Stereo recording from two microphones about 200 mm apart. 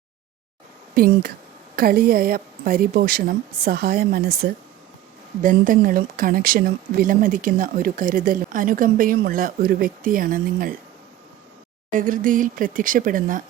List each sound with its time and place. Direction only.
0.9 s speech: 50° right (ahead or behind)
5.4 s speech: 40° right (ahead or behind)
11.9 s speech: 40° right (ahead or behind)